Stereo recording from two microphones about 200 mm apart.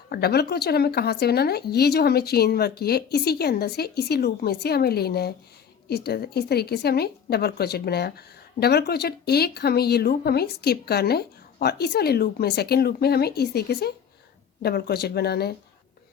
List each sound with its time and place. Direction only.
0.1 s a woman's voice: 50° left (ahead or behind)